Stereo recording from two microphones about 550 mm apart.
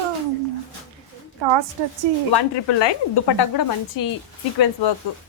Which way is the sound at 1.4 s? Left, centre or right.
Right.